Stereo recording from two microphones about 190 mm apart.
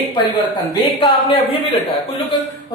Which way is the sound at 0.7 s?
25° left (ahead or behind).